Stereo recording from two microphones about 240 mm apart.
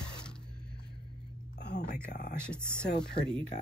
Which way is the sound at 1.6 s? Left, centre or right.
Left.